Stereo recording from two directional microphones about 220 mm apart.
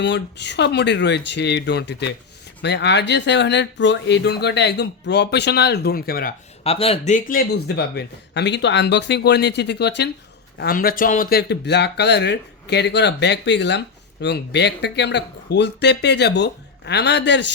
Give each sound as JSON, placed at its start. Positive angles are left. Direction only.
{"t": 0.0, "sound": "speech", "side_deg": 50}
{"t": 6.7, "sound": "speech", "side_deg": 25}